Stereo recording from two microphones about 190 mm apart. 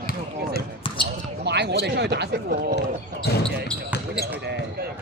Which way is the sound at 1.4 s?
60° right (ahead or behind).